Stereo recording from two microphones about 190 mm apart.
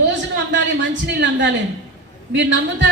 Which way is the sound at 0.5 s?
70° right (ahead or behind).